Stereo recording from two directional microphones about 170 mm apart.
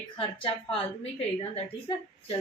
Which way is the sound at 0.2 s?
30° left (ahead or behind).